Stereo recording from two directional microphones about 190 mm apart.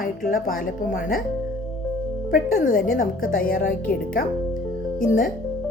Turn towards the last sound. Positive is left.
turn(degrees=45)  # may be behind; listen again after turning